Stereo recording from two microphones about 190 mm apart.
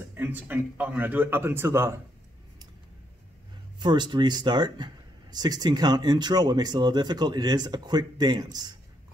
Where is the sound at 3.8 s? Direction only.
25° right (ahead or behind).